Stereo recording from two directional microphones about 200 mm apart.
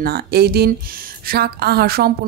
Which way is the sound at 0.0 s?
50° right (ahead or behind).